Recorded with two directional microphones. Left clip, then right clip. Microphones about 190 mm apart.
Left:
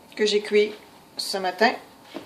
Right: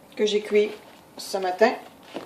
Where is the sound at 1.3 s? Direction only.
35° left (ahead or behind).